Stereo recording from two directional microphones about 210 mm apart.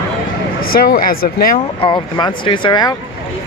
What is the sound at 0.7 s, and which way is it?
Speech, 45° left (ahead or behind).